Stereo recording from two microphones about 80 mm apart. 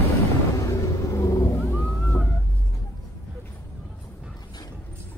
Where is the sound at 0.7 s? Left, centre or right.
Left.